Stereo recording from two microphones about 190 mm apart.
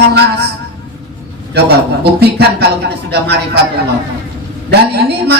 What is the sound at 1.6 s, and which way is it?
A man's voice, 55° right (ahead or behind).